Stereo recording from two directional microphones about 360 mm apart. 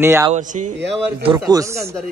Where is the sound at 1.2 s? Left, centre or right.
Centre.